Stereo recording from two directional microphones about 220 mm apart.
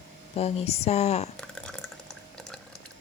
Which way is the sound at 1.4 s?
5° left (ahead or behind).